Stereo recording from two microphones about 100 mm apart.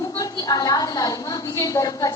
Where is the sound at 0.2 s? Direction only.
40° left (ahead or behind).